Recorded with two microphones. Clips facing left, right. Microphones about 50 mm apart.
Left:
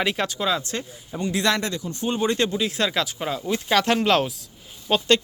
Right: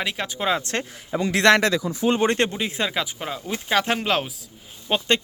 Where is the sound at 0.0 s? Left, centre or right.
Centre.